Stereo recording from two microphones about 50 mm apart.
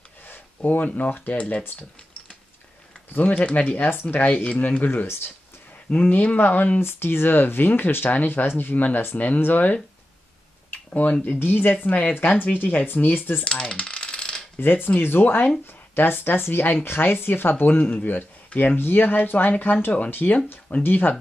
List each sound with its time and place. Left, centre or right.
0.3 s a sound: left
0.8 s speech: left
3.1 s speech: left
3.9 s speech: left
6.8 s speech: left
10.7 s a sound: left
11.3 s speech: left
11.7 s speech: left
13.4 s coin: centre
14.6 s speech: left
18.8 s speech: left